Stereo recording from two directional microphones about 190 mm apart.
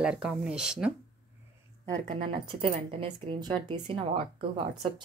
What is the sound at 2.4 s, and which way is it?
Speech, 25° right (ahead or behind).